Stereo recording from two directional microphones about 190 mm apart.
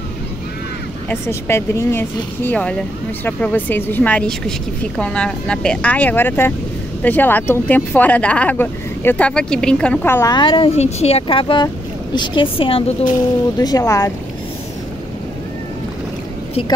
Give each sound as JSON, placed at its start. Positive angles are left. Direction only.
{"t": 1.0, "sound": "speech", "side_deg": 15}
{"t": 10.3, "sound": "speech", "side_deg": 25}